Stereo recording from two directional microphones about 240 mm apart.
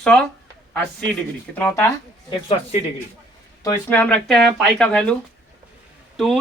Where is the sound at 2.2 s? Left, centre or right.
Left.